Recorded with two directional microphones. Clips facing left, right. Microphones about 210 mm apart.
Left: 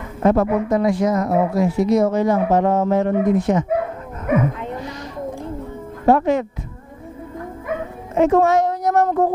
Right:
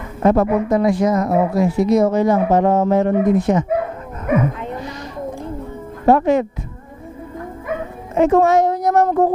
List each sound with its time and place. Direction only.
0.2 s a woman's voice: 20° right (ahead or behind)
6.0 s a woman's voice: 15° right (ahead or behind)
8.2 s a woman's voice: 15° right (ahead or behind)